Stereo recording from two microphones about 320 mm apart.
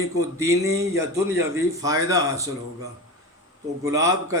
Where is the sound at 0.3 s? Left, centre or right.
Centre.